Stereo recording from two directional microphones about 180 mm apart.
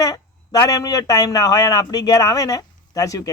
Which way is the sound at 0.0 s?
20° left (ahead or behind).